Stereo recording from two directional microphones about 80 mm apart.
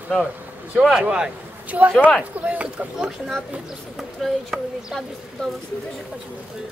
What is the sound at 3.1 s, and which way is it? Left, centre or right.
Speech, centre.